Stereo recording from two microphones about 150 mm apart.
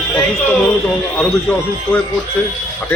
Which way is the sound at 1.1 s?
10° left (ahead or behind).